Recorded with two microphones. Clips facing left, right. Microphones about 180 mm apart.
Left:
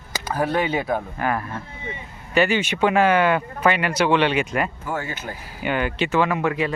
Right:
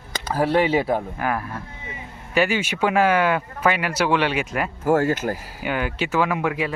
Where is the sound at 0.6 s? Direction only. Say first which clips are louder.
Right 3 dB; 5° right (ahead or behind).